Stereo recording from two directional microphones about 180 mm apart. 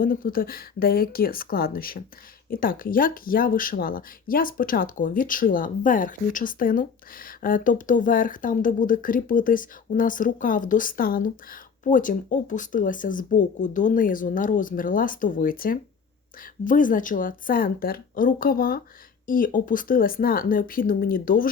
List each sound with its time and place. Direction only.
0.0 s speech: 50° left (ahead or behind)